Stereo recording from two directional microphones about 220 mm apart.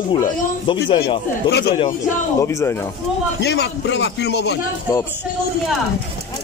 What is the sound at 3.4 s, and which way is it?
A man's voice, 50° left (ahead or behind).